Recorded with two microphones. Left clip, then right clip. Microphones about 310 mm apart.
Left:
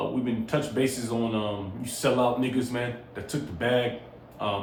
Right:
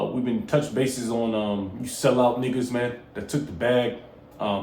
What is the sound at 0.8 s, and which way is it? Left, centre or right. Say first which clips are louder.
Speech: right 2 dB; right.